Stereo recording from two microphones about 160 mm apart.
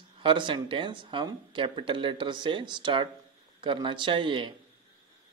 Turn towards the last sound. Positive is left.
turn(degrees=-30)  # may be behind; listen again after turning